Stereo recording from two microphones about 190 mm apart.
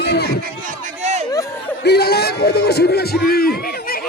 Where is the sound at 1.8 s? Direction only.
55° left (ahead or behind).